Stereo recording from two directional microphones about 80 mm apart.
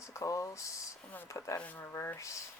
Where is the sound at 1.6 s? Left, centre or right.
Left.